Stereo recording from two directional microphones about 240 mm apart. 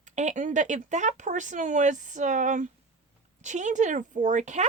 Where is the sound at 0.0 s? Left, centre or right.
Right.